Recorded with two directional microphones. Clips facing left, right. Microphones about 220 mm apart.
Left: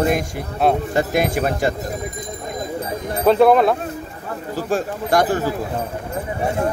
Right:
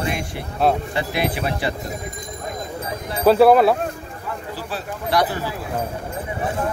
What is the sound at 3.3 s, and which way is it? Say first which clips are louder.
Speech: even; 5° right (ahead or behind).